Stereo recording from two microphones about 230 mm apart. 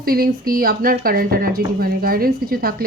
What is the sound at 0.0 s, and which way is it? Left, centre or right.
A woman's voice, right.